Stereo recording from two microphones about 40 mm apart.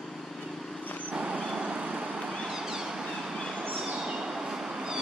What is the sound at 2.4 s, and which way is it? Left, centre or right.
Vehicle, centre.